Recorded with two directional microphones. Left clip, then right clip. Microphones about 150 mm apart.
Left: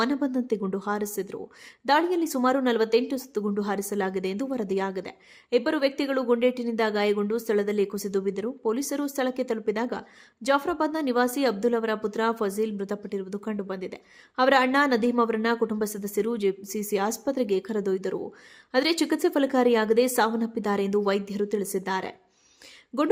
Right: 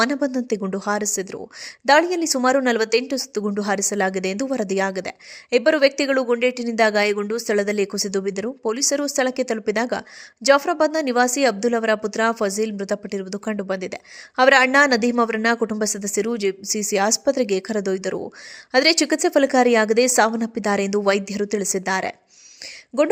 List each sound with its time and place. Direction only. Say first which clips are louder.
0.0 s a woman's voice: right 6 dB; 15° right (ahead or behind)